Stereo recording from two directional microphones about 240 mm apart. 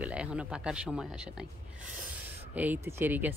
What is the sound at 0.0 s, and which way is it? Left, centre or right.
Speech, centre.